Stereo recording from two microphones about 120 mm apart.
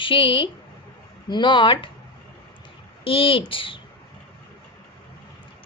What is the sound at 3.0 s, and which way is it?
Speech, 50° left (ahead or behind).